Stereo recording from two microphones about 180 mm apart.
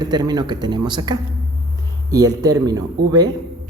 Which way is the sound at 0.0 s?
25° right (ahead or behind).